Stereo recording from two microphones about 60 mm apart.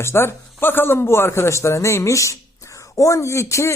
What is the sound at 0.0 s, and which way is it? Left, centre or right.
Speech, left.